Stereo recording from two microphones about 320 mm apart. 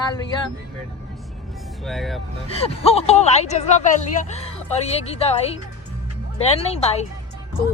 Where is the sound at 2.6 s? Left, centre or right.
Centre.